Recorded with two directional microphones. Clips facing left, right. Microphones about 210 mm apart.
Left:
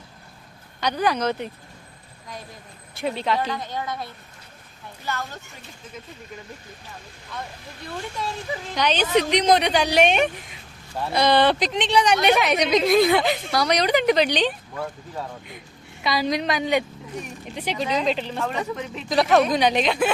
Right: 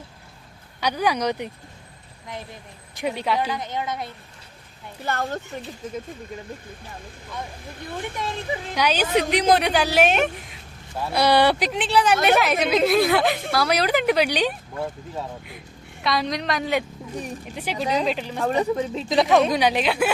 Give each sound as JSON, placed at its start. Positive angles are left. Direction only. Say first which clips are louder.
{"t": 0.8, "sound": "a woman's voice", "louder": "even", "side_deg": -10}
{"t": 2.9, "sound": "a woman's voice", "louder": "even", "side_deg": -15}
{"t": 5.0, "sound": "speech", "louder": "right 5 dB", "side_deg": -55}
{"t": 8.4, "sound": "a woman's voice", "louder": "right 1 dB", "side_deg": -10}
{"t": 18.4, "sound": "speech", "louder": "right 10 dB", "side_deg": -35}
{"t": 19.5, "sound": "a woman's voice", "louder": "even", "side_deg": -10}